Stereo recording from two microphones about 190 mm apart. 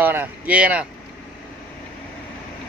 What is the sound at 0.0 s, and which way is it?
Speech, 10° right (ahead or behind).